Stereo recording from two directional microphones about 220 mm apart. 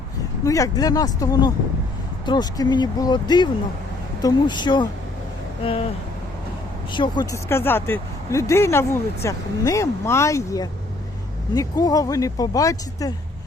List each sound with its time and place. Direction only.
0.4 s speech: 15° left (ahead or behind)
6.9 s speech: 20° left (ahead or behind)